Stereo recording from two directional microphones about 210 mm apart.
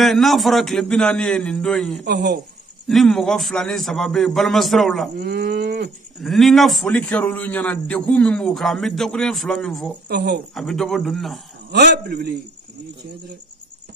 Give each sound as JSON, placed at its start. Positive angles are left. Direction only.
{"t": 0.0, "sound": "a man's voice", "side_deg": 0}
{"t": 2.0, "sound": "livestock", "side_deg": -50}
{"t": 2.9, "sound": "a man's voice", "side_deg": 0}
{"t": 5.1, "sound": "livestock", "side_deg": -50}
{"t": 6.2, "sound": "a man's voice", "side_deg": 0}
{"t": 10.0, "sound": "livestock", "side_deg": -50}
{"t": 10.5, "sound": "a man's voice", "side_deg": 0}
{"t": 11.7, "sound": "livestock", "side_deg": -50}